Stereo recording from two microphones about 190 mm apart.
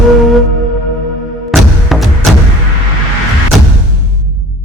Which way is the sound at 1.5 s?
Centre (ahead or behind).